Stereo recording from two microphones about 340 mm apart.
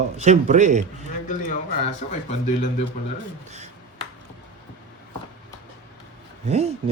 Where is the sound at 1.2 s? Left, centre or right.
Left.